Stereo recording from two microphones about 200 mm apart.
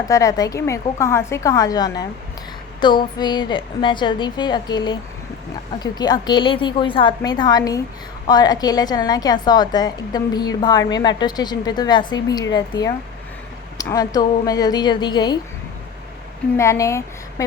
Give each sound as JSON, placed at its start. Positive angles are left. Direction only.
{"t": 0.1, "sound": "a woman's voice", "side_deg": 15}
{"t": 16.6, "sound": "speech", "side_deg": 15}